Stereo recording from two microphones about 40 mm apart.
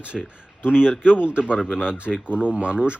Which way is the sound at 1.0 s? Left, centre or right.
Right.